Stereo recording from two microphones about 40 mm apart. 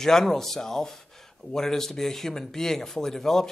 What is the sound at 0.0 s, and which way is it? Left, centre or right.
Speech, centre.